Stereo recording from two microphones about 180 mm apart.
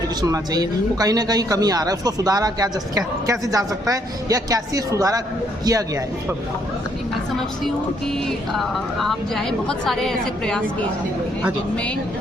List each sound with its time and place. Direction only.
0.2 s speech: 20° right (ahead or behind)
8.5 s a woman's voice: centre (ahead or behind)